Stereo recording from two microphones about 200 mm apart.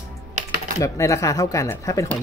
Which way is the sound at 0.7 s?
15° left (ahead or behind).